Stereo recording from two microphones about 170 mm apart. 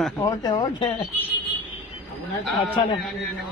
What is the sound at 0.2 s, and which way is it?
Speech, 20° left (ahead or behind).